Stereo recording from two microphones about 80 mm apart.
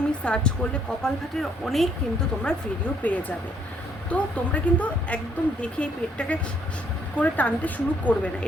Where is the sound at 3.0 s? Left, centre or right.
Left.